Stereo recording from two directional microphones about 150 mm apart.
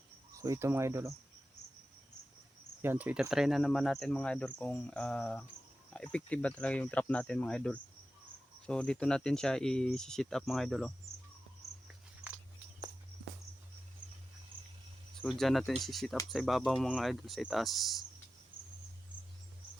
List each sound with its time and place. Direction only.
0.3 s speech: 20° right (ahead or behind)
2.8 s cricket: 15° right (ahead or behind); by 5.5 s 10° left (ahead or behind)
5.9 s speech: 5° left (ahead or behind)
8.6 s cricket: 5° left (ahead or behind)
11.6 s a sound: centre (ahead or behind)
15.3 s cricket: centre (ahead or behind)